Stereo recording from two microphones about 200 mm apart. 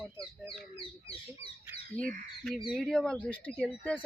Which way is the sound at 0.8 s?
25° left (ahead or behind).